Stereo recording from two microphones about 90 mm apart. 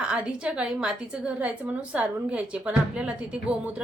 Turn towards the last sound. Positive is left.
turn(degrees=-10)  # may be behind; listen again after turning